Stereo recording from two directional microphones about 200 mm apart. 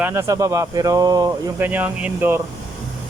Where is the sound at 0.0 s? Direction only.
15° right (ahead or behind).